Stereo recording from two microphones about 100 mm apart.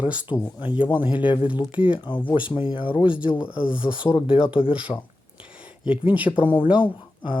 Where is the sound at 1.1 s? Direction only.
55° left (ahead or behind).